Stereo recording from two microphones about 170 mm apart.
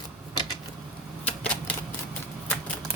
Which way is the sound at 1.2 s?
5° left (ahead or behind).